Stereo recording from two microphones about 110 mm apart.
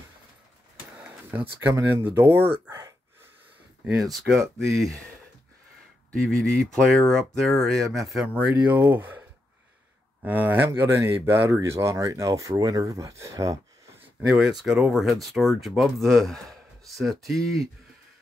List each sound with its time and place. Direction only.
1.3 s speech: 20° right (ahead or behind)
3.8 s speech: centre (ahead or behind)
6.2 s speech: 5° left (ahead or behind)
8.7 s speech: 20° right (ahead or behind)
10.2 s speech: 15° right (ahead or behind)
14.2 s speech: 5° right (ahead or behind)